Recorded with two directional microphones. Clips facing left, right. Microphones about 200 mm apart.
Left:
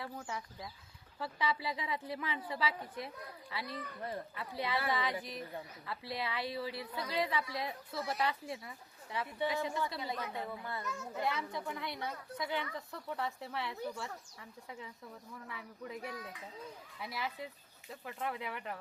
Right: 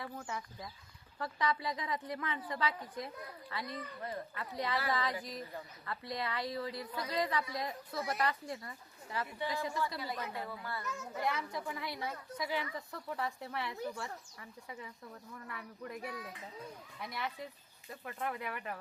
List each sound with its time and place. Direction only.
0.0 s speech: centre (ahead or behind)
4.9 s speech: centre (ahead or behind)
9.6 s speech: 20° left (ahead or behind)
10.2 s speech: centre (ahead or behind)
10.6 s speech: 20° left (ahead or behind)
11.0 s speech: centre (ahead or behind)